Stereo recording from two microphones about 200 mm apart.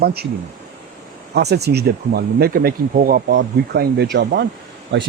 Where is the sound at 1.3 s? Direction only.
55° right (ahead or behind).